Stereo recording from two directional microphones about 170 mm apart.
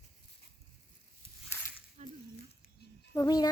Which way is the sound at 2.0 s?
40° right (ahead or behind).